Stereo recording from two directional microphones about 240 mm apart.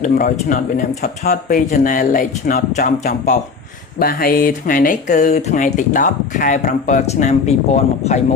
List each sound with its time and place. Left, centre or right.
0.0 s speech: left